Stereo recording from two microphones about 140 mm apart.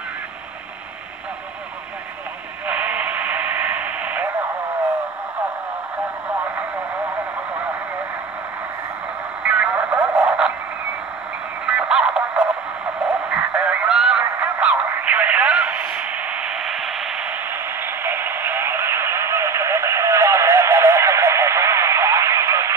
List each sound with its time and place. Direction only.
2.6 s radio: 10° right (ahead or behind)
9.4 s radio: 10° right (ahead or behind)
11.6 s music: 5° right (ahead or behind)
13.0 s a sound: 10° right (ahead or behind)